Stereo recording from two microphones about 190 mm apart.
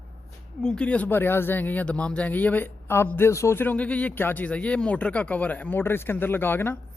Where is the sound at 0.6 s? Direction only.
5° left (ahead or behind).